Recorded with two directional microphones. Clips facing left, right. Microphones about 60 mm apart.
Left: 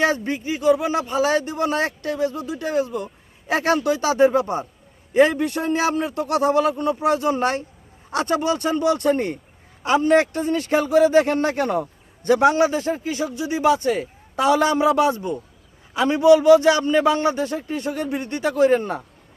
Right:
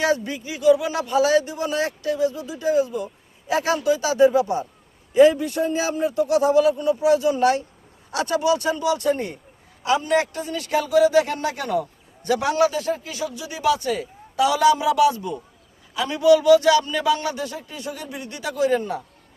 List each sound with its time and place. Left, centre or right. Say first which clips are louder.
0.0 s a man's voice: left 1 dB; left